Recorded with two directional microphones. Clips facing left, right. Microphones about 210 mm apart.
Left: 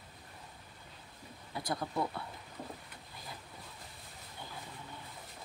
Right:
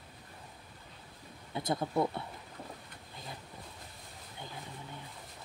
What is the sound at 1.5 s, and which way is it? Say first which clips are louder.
Speech: right 4 dB; 25° right (ahead or behind).